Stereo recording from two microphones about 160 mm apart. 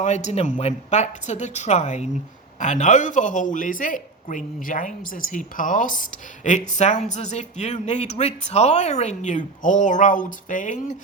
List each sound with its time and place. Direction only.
0.0 s a woman's voice: 45° left (ahead or behind)